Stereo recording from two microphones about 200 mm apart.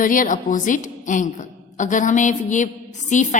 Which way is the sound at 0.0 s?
40° left (ahead or behind).